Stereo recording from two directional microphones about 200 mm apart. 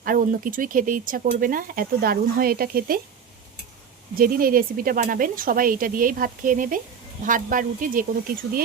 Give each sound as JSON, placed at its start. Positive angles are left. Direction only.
{"t": 0.0, "sound": "speech", "side_deg": -45}
{"t": 4.2, "sound": "speech", "side_deg": -45}